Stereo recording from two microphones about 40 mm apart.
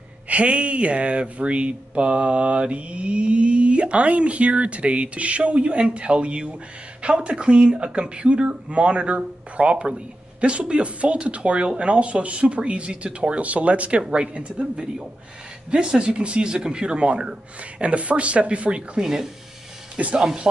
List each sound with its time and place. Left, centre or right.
0.3 s speech: right
14.0 s speech: right
17.8 s speech: right
19.0 s speech: centre